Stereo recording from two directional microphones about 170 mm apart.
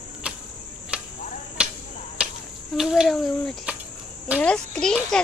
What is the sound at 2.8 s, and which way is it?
A child's voice, 5° right (ahead or behind).